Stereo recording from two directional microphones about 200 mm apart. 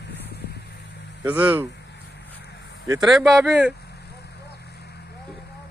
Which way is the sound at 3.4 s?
5° right (ahead or behind).